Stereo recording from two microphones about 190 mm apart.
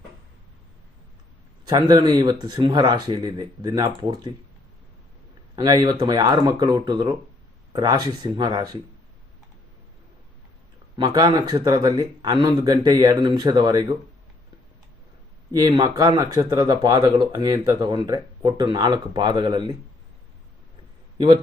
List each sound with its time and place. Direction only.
1.6 s speech: 20° right (ahead or behind)
5.5 s speech: 20° right (ahead or behind)
10.9 s speech: 20° right (ahead or behind)
15.5 s speech: 20° right (ahead or behind)